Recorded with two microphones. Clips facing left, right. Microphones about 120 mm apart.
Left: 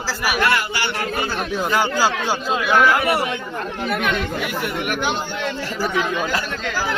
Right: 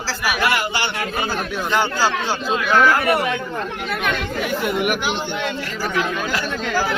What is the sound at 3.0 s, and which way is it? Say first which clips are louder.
Speech: right 1 dB; 30° left (ahead or behind).